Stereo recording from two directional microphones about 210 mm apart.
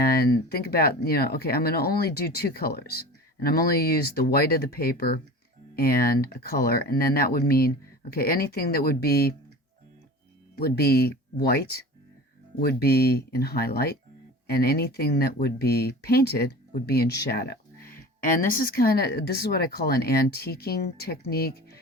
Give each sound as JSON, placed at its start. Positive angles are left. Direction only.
{"t": 0.0, "sound": "speech", "side_deg": 45}
{"t": 10.5, "sound": "speech", "side_deg": 50}